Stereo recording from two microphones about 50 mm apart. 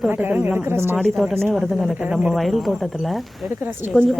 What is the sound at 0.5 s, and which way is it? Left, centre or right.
Speech, right.